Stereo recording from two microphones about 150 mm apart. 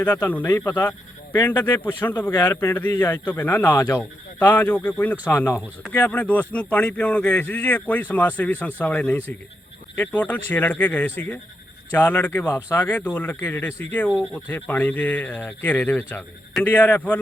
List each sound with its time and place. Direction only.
0.3 s speech: 15° left (ahead or behind)
2.3 s speech: 25° left (ahead or behind)